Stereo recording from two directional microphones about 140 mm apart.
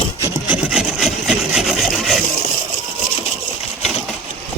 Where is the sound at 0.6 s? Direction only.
5° right (ahead or behind).